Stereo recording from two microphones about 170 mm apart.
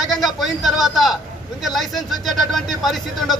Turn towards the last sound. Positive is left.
turn(degrees=0)  # may be behind; listen again after turning